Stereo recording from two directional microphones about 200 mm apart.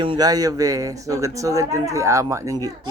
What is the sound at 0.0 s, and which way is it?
Speech, 20° right (ahead or behind).